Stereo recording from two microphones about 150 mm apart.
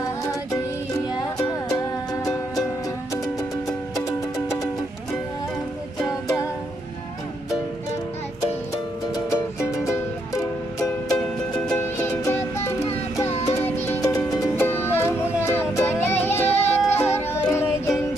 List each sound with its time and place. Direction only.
0.0 s music: 25° left (ahead or behind)
3.9 s music: 20° left (ahead or behind)
6.0 s music: 20° left (ahead or behind)
9.1 s music: 20° left (ahead or behind)
11.1 s music: 5° left (ahead or behind)
11.8 s music: 15° left (ahead or behind)
16.4 s music: 45° left (ahead or behind)
17.2 s music: 15° left (ahead or behind)